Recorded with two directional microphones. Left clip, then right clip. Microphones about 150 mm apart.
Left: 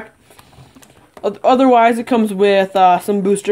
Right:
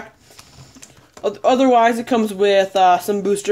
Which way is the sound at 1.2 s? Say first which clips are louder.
Left 3 dB; 20° left (ahead or behind).